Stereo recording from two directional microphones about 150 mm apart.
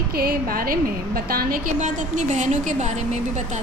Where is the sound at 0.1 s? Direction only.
90° right.